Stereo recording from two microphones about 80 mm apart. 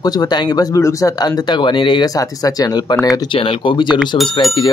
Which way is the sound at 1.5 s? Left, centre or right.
Left.